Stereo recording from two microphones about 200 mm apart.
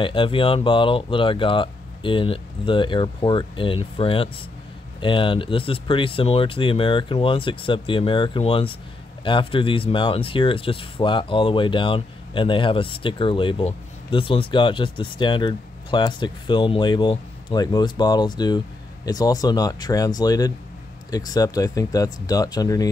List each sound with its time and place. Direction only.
0.0 s speech: 25° left (ahead or behind)